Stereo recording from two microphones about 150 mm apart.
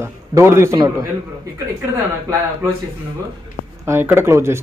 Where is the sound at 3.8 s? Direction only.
15° right (ahead or behind).